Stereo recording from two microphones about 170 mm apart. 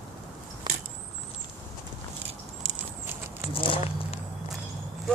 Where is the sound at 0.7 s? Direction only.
25° right (ahead or behind).